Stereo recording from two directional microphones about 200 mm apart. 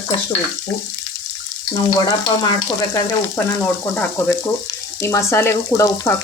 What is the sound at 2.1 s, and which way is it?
Frying, 15° left (ahead or behind).